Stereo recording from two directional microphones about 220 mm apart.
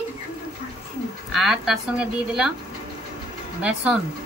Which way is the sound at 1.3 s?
Centre (ahead or behind).